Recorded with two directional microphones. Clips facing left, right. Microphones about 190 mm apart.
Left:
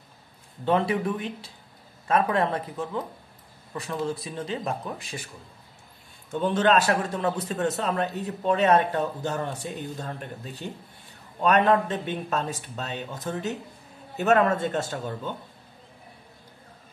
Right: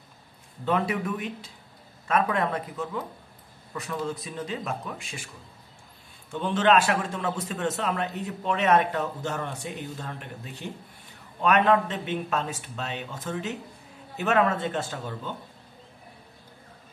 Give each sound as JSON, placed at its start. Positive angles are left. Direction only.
{"t": 0.7, "sound": "a man's voice", "side_deg": 30}
{"t": 6.4, "sound": "a man's voice", "side_deg": 40}